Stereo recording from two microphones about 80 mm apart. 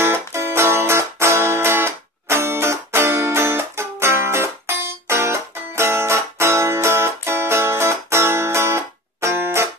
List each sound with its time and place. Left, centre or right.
0.0 s music: right